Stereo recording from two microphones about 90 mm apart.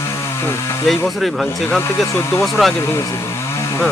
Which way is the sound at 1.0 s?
Centre (ahead or behind).